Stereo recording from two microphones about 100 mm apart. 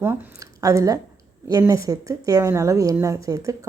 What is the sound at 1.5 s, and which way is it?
Speech, 35° right (ahead or behind).